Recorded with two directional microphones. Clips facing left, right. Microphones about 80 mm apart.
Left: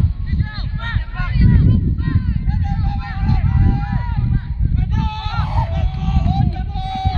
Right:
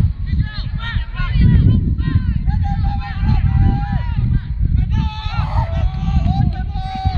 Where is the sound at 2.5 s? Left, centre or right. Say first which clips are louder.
Right 1 dB; right.